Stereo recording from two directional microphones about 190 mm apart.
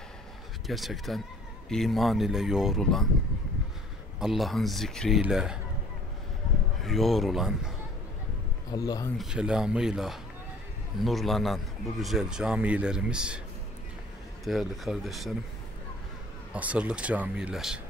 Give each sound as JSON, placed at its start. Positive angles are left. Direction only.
{"t": 0.7, "sound": "a man's voice", "side_deg": 0}
{"t": 4.2, "sound": "a man's voice", "side_deg": 0}
{"t": 6.8, "sound": "a man's voice", "side_deg": 0}
{"t": 8.7, "sound": "speech", "side_deg": 20}
{"t": 9.2, "sound": "a man's voice", "side_deg": -5}
{"t": 14.4, "sound": "a man's voice", "side_deg": 0}
{"t": 16.5, "sound": "speech", "side_deg": -5}